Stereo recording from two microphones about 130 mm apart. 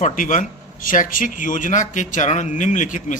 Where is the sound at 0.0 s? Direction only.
80° left.